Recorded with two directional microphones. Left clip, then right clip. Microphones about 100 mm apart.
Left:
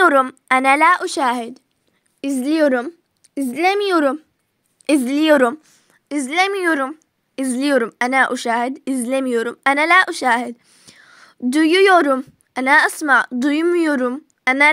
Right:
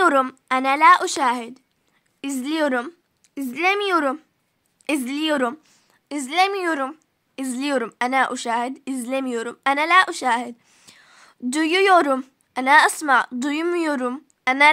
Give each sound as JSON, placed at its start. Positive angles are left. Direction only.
{"t": 0.5, "sound": "a woman's voice", "side_deg": 60}
{"t": 0.8, "sound": "speech", "side_deg": 30}
{"t": 2.1, "sound": "a woman's voice", "side_deg": 30}
{"t": 3.2, "sound": "speech", "side_deg": 30}
{"t": 5.0, "sound": "a woman's voice", "side_deg": 60}
{"t": 5.5, "sound": "a woman's voice", "side_deg": 30}
{"t": 7.0, "sound": "a sound", "side_deg": 50}
{"t": 8.0, "sound": "speech", "side_deg": 40}
{"t": 10.6, "sound": "a sound", "side_deg": 15}
{"t": 10.9, "sound": "a sound", "side_deg": 30}
{"t": 12.5, "sound": "a woman's voice", "side_deg": 35}
{"t": 14.2, "sound": "a sound", "side_deg": 35}